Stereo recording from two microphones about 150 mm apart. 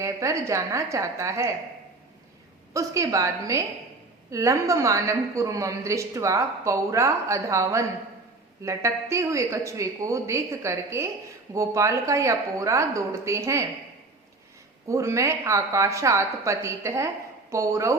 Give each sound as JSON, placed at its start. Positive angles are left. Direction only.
{"t": 0.0, "sound": "a woman's voice", "side_deg": -20}
{"t": 2.7, "sound": "a woman's voice", "side_deg": -20}
{"t": 14.8, "sound": "a woman's voice", "side_deg": -20}